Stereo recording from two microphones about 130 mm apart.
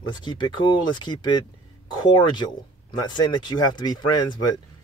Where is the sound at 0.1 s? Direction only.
35° left (ahead or behind).